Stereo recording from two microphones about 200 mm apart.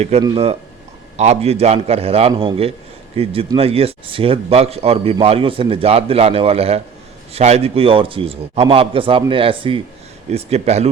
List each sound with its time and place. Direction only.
0.0 s a man's voice: 30° right (ahead or behind)